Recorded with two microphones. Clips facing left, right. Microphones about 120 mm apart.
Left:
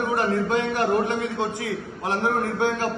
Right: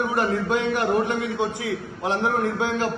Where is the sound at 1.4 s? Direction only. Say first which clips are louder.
Right 1 dB; 20° right (ahead or behind).